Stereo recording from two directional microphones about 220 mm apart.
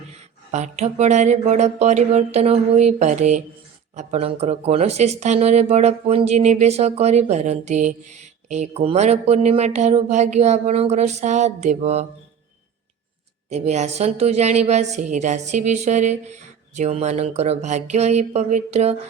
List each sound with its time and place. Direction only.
0.5 s speech: 30° right (ahead or behind)
13.5 s speech: 30° right (ahead or behind)